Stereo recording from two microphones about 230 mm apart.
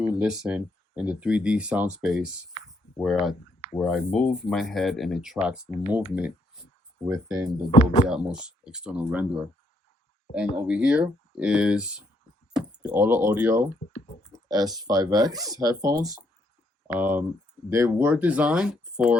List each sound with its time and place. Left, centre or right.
0.0 s speech: centre
8.0 s speech: centre